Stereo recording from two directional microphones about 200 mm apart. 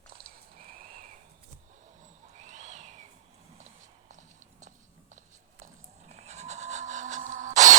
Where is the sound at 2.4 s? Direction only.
40° right (ahead or behind).